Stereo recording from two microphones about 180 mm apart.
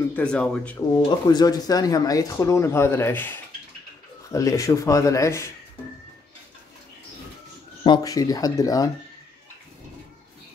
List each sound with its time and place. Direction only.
0.1 s speech: 5° left (ahead or behind)
0.7 s speech: 20° left (ahead or behind)
7.8 s speech: 25° left (ahead or behind)